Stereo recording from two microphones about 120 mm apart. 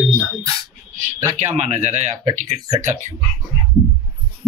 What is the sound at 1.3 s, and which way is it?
Speech, 75° right (ahead or behind).